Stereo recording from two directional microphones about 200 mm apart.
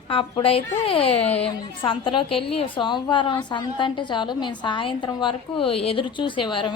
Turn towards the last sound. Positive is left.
turn(degrees=25)  # may be behind; listen again after turning